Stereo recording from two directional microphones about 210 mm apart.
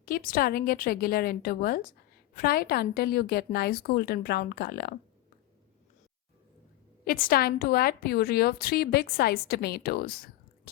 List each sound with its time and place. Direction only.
0.0 s a woman's voice: 45° left (ahead or behind)
7.0 s a woman's voice: 45° left (ahead or behind)